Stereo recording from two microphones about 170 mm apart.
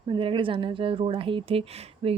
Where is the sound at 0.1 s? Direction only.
30° right (ahead or behind).